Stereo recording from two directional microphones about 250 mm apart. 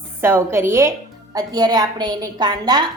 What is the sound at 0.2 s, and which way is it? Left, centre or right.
A woman's voice, centre.